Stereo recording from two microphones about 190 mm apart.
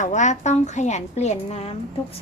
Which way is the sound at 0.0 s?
40° left (ahead or behind).